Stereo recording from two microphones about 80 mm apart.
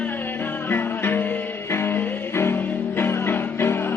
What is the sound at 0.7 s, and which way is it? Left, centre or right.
Music, left.